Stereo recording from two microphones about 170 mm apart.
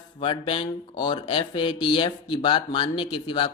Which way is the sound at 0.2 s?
30° left (ahead or behind).